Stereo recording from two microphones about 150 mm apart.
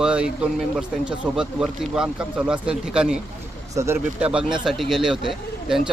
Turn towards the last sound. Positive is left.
turn(degrees=0)  # may be behind; listen again after turning